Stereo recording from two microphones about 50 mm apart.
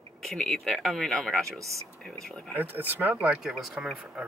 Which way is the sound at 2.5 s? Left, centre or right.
Right.